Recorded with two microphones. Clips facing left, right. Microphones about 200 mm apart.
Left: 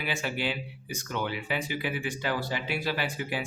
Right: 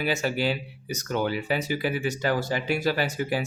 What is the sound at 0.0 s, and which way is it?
Speech, 40° right (ahead or behind).